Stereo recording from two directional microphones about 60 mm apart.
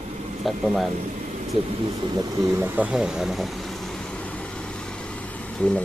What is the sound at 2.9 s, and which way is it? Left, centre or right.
Vehicle, centre.